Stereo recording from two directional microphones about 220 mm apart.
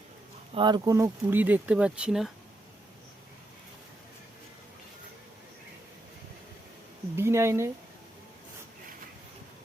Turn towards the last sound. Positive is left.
turn(degrees=-10)  # may be behind; listen again after turning